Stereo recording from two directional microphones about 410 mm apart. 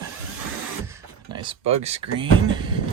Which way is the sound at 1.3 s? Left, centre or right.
Centre.